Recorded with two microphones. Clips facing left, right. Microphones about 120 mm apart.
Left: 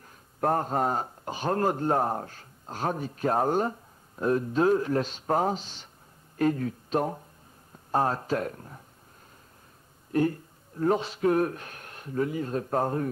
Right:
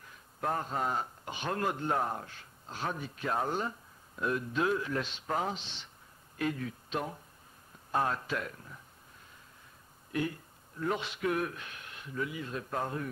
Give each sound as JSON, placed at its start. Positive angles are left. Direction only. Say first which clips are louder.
{"t": 0.0, "sound": "speech", "louder": "left 8 dB", "side_deg": 45}
{"t": 10.1, "sound": "speech", "louder": "left 9 dB", "side_deg": 40}